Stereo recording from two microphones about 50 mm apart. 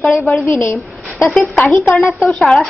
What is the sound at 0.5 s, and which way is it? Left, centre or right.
Speech, left.